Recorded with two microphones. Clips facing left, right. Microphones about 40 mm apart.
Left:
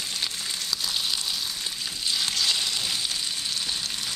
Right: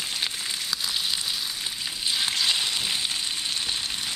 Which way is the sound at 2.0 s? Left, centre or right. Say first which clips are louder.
Right 1 dB; right.